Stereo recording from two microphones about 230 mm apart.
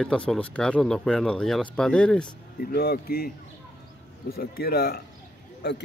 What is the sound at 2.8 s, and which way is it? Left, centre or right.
Speech, left.